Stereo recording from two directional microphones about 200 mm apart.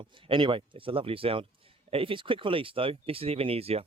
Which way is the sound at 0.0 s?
25° right (ahead or behind).